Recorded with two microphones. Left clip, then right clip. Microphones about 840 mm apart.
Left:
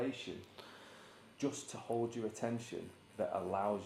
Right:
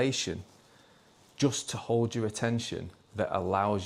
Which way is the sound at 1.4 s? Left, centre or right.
Right.